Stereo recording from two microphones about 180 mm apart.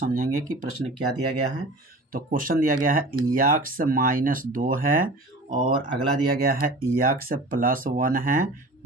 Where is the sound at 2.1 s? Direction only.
50° right (ahead or behind).